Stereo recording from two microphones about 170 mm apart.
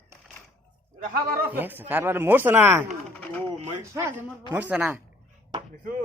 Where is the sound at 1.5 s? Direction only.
10° right (ahead or behind).